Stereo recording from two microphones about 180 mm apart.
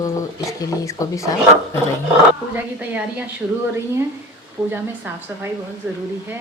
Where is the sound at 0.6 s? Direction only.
20° left (ahead or behind).